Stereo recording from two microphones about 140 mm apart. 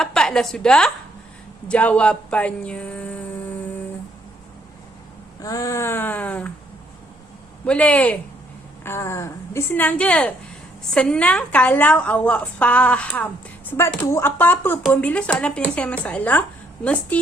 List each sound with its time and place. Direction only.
0.0 s a woman's voice: 5° left (ahead or behind)
5.4 s a woman's voice: 25° left (ahead or behind)
7.6 s a woman's voice: 10° left (ahead or behind)